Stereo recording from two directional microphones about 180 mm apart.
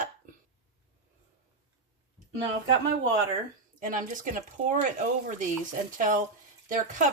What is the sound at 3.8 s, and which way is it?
Speech, 50° right (ahead or behind).